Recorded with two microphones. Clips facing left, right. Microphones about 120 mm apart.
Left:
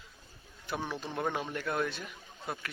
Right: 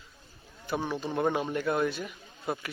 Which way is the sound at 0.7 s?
Centre (ahead or behind).